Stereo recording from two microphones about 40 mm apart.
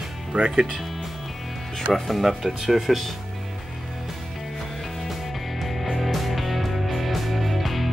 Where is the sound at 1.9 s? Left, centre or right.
Centre.